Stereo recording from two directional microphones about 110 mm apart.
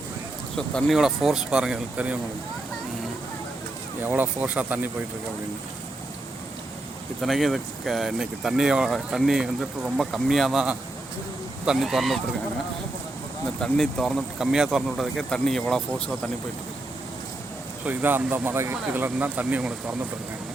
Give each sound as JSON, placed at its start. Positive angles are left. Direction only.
{"t": 0.5, "sound": "speech", "side_deg": 5}
{"t": 4.0, "sound": "speech", "side_deg": -15}
{"t": 7.2, "sound": "speech", "side_deg": 0}
{"t": 13.6, "sound": "speech", "side_deg": 0}
{"t": 17.8, "sound": "speech", "side_deg": -20}